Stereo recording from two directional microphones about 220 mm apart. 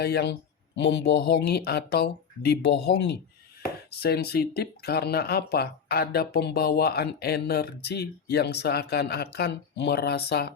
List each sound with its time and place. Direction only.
0.0 s speech: 50° left (ahead or behind)